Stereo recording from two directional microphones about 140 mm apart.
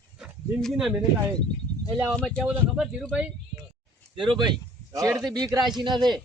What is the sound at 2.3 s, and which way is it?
Speech, 5° right (ahead or behind).